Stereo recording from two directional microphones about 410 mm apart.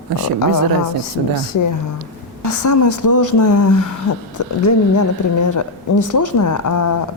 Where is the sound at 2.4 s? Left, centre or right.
Left.